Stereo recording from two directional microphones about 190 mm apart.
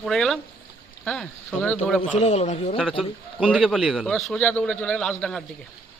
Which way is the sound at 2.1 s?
35° left (ahead or behind).